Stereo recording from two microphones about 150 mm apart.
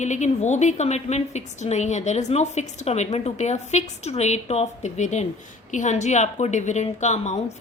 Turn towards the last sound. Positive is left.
turn(degrees=50)  # may be behind; listen again after turning